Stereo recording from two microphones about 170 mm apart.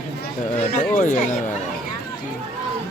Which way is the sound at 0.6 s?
45° left (ahead or behind).